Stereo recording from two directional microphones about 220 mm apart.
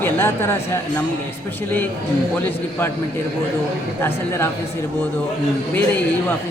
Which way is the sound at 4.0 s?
10° left (ahead or behind).